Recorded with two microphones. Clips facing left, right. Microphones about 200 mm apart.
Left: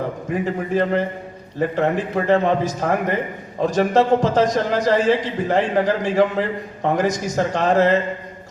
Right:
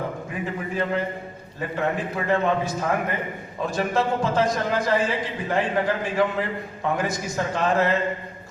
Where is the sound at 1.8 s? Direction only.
40° left (ahead or behind).